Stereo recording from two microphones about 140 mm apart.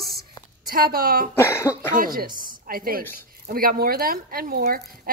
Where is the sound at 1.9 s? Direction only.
85° right.